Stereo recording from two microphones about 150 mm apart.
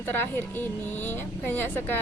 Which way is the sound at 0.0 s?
15° left (ahead or behind).